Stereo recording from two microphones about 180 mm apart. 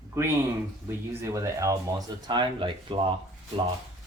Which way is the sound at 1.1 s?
15° right (ahead or behind).